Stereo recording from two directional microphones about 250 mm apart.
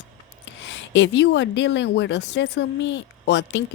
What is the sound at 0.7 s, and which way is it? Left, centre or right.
A woman's voice, left.